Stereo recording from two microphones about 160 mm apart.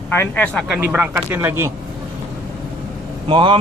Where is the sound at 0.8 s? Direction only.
10° right (ahead or behind).